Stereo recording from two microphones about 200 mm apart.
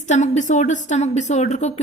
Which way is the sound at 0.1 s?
35° left (ahead or behind).